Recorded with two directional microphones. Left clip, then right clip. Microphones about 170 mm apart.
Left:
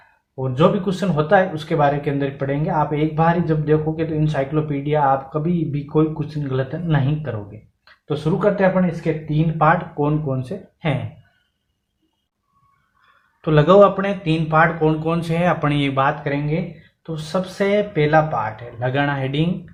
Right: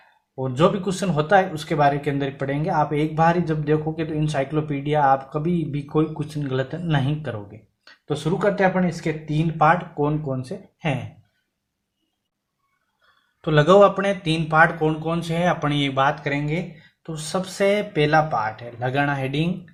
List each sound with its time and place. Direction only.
0.3 s speech: 40° right (ahead or behind)
10.0 s speech: 20° right (ahead or behind)
13.4 s speech: 25° right (ahead or behind)